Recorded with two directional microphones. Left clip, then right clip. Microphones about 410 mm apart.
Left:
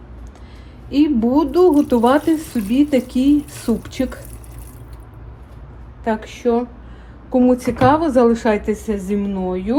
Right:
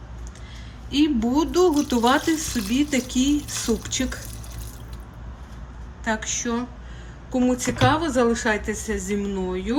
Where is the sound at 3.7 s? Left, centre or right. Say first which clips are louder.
Left 4 dB; left.